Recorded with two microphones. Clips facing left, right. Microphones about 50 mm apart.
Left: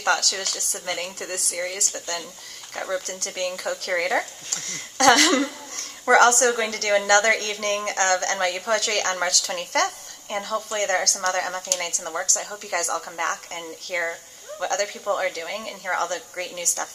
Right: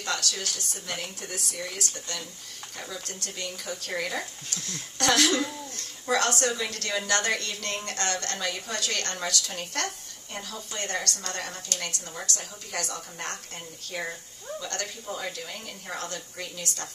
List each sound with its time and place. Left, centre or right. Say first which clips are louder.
0.0 s a woman's voice: left 8 dB; left
2.7 s a woman's voice: left 11 dB; left
4.5 s a woman's voice: left 2 dB; left
13.8 s a woman's voice: left 7 dB; left